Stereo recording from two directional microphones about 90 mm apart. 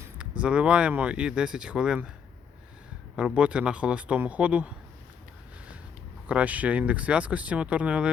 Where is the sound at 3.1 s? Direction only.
10° right (ahead or behind).